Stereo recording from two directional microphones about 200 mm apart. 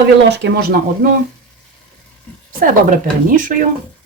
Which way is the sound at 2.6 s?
40° right (ahead or behind).